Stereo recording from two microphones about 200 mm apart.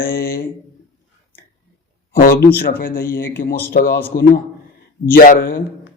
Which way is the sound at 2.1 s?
45° left (ahead or behind).